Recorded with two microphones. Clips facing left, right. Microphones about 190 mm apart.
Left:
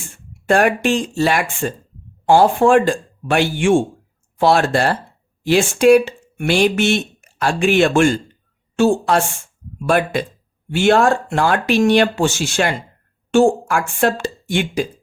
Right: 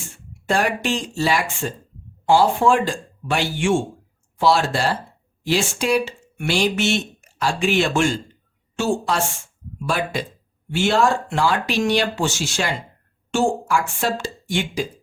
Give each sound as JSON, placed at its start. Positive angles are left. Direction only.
{"t": 0.4, "sound": "a woman's voice", "side_deg": 55}